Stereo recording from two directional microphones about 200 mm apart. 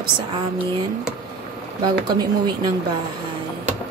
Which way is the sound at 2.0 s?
20° right (ahead or behind).